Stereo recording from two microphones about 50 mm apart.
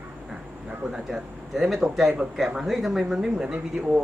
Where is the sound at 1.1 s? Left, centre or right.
Centre.